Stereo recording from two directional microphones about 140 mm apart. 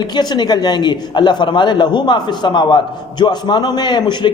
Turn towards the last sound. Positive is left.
turn(degrees=30)  # may be behind; listen again after turning